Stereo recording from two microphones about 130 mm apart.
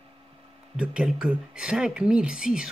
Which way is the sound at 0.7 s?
5° right (ahead or behind).